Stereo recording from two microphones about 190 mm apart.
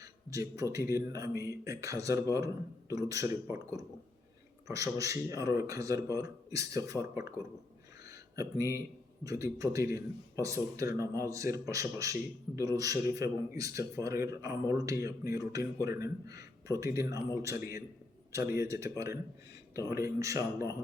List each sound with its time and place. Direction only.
0.0 s a man's voice: 15° right (ahead or behind)
8.0 s a sound: 15° right (ahead or behind)
9.2 s speech: 15° right (ahead or behind)